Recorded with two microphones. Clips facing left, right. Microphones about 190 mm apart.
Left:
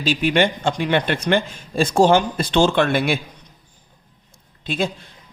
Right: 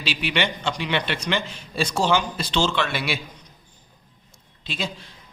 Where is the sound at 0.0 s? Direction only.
45° left (ahead or behind).